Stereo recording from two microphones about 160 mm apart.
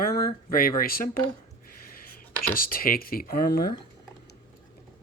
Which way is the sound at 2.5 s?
65° left (ahead or behind).